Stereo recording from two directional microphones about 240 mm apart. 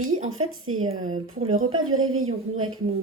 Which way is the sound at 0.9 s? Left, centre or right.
Right.